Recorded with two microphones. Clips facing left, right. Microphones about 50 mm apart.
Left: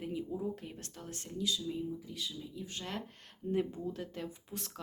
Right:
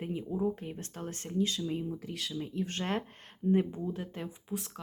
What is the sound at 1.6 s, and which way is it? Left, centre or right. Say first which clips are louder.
Speech: right 3 dB; right.